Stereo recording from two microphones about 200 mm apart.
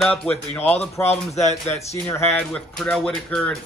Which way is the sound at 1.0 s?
35° left (ahead or behind).